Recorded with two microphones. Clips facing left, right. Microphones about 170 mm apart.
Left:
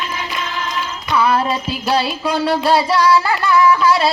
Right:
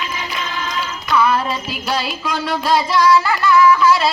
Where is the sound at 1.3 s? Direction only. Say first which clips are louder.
Left 2 dB; 30° left (ahead or behind).